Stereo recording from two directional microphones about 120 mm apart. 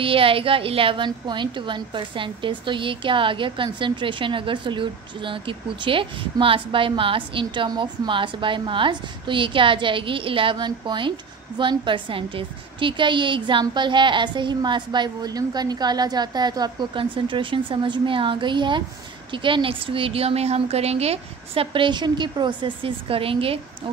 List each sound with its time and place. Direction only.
0.0 s a woman's voice: 50° right (ahead or behind)